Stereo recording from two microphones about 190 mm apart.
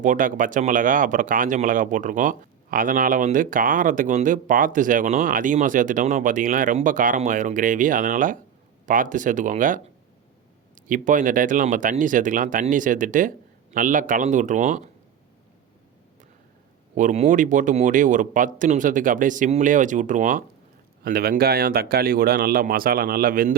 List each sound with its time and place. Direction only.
0.0 s speech: 45° right (ahead or behind)
10.8 s speech: 45° right (ahead or behind)
16.9 s speech: 40° right (ahead or behind)
21.0 s speech: 55° right (ahead or behind)